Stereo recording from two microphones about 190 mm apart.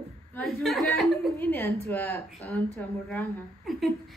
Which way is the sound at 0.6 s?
Centre (ahead or behind).